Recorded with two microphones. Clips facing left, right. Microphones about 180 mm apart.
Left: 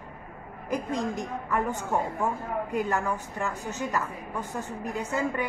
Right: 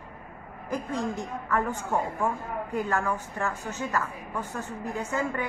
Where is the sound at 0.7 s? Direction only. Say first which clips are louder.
Left 1 dB; 15° left (ahead or behind).